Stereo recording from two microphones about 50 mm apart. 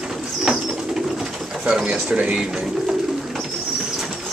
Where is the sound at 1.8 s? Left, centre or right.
Centre.